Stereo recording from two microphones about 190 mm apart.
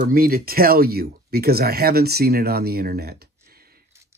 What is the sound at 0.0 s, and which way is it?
Speech, 50° right (ahead or behind).